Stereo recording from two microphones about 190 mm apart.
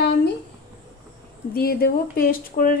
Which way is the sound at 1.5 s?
50° left (ahead or behind).